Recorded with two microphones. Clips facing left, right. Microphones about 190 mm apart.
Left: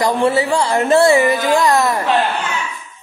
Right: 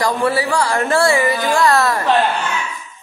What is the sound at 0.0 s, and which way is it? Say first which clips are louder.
A woman's voice: left 2 dB; 25° left (ahead or behind).